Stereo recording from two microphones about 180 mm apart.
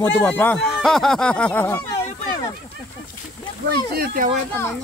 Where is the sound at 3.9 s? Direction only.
55° right (ahead or behind).